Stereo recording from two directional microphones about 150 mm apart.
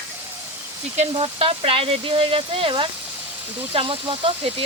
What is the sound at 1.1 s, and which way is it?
Speech, 40° right (ahead or behind).